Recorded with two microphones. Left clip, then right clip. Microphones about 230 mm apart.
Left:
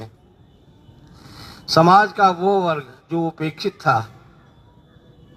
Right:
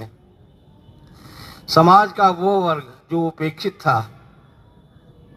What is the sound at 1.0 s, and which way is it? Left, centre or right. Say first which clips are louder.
Speech: even; right.